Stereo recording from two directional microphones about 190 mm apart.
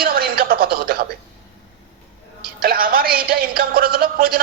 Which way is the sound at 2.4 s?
50° right (ahead or behind).